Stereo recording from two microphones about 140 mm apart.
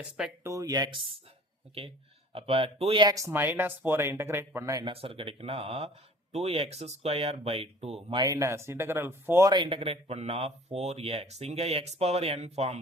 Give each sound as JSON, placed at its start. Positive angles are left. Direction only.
{"t": 0.4, "sound": "speech", "side_deg": -25}
{"t": 2.3, "sound": "speech", "side_deg": -40}
{"t": 4.9, "sound": "speech", "side_deg": -40}
{"t": 8.1, "sound": "speech", "side_deg": -25}
{"t": 9.5, "sound": "speech", "side_deg": -35}